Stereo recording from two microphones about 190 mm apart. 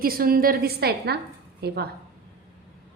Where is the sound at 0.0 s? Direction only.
50° right (ahead or behind).